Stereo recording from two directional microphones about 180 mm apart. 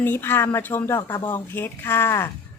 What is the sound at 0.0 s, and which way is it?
Speech, 10° left (ahead or behind).